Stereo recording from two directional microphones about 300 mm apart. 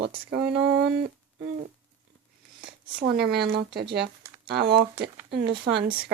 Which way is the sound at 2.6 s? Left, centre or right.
Right.